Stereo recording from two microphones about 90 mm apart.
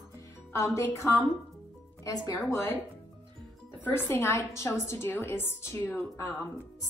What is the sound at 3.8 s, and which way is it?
Speech, 25° left (ahead or behind).